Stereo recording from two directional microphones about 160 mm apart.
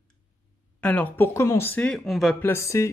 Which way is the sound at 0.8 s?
10° left (ahead or behind).